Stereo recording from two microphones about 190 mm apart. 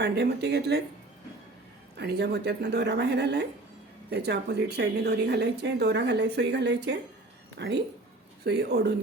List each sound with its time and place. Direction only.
0.0 s a woman's voice: 60° right (ahead or behind)
2.0 s a woman's voice: 60° right (ahead or behind)